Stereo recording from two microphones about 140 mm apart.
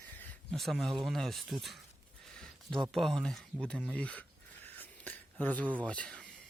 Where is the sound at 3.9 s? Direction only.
10° left (ahead or behind).